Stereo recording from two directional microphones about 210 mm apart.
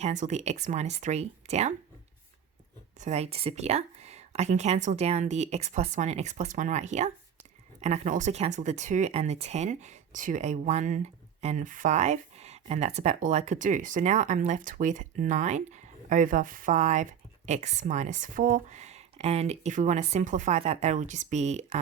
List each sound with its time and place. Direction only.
0.0 s speech: 35° right (ahead or behind)
3.0 s speech: 30° right (ahead or behind)